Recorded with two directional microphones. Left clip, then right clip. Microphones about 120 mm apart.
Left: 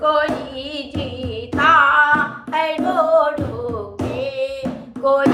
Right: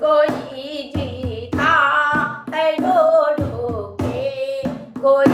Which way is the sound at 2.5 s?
20° left (ahead or behind).